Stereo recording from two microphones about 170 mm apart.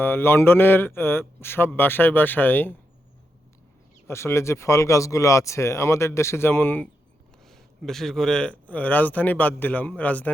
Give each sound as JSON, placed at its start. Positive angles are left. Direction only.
{"t": 0.0, "sound": "speech", "side_deg": 15}
{"t": 4.0, "sound": "speech", "side_deg": 15}